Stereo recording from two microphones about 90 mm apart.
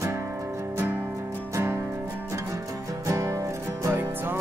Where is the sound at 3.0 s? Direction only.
35° right (ahead or behind).